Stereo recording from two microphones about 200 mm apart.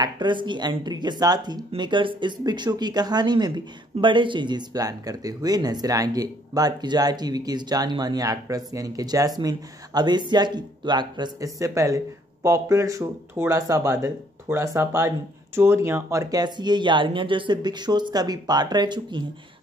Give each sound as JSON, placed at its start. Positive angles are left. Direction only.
{"t": 0.0, "sound": "speech", "side_deg": -25}